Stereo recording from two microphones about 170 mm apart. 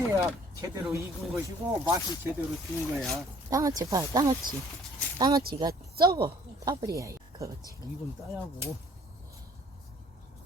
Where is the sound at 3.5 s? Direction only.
20° right (ahead or behind).